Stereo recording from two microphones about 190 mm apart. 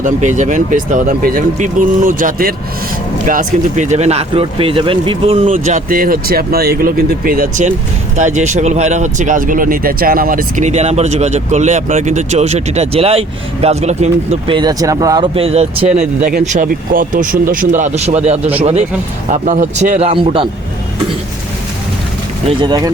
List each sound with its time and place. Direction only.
0.0 s speech: 40° right (ahead or behind)
16.4 s speech: 40° right (ahead or behind)
20.1 s a man's voice: 30° right (ahead or behind)
22.6 s a man's voice: 20° right (ahead or behind)